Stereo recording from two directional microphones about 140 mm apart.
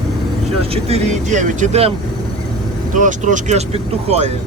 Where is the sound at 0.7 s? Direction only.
45° right (ahead or behind).